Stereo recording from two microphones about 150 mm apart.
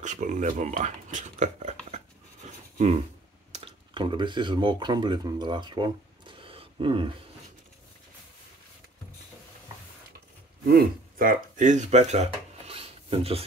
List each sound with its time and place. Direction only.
0.0 s speech: 55° right (ahead or behind)
3.5 s speech: 35° right (ahead or behind)
10.7 s speech: 70° right (ahead or behind); by 13.5 s 40° right (ahead or behind)